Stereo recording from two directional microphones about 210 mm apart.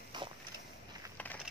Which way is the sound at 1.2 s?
5° left (ahead or behind).